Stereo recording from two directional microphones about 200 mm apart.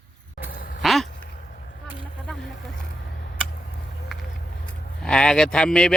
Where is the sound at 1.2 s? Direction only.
45° left (ahead or behind).